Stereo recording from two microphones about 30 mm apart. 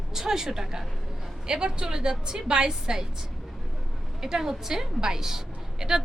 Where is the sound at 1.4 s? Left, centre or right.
Right.